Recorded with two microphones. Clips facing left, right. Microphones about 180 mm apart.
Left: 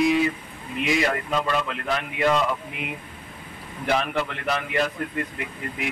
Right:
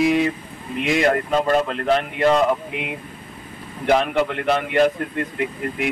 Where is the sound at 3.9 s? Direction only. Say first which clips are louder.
Right 6 dB; 50° right (ahead or behind).